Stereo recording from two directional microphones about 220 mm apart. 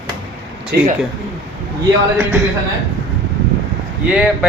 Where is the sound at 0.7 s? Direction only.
45° right (ahead or behind).